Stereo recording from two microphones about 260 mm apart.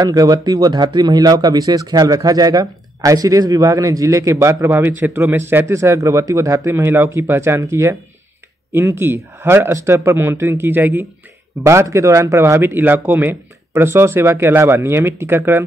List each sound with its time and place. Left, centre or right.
0.0 s speech: centre